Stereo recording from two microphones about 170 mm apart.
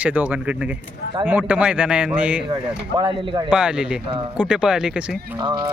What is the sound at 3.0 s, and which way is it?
Speech, 25° right (ahead or behind).